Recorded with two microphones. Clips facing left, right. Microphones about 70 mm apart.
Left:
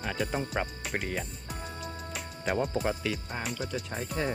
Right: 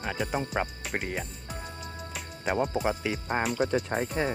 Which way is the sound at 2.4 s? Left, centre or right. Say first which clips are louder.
Right 2 dB; centre.